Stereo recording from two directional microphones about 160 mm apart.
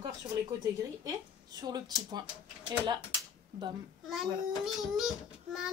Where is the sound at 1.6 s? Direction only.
25° right (ahead or behind).